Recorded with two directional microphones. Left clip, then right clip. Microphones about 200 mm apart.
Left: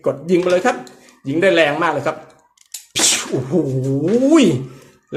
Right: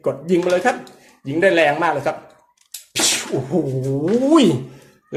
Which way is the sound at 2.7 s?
10° left (ahead or behind).